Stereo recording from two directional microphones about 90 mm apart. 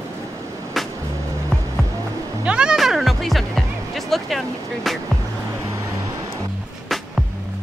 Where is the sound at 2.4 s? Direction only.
10° right (ahead or behind).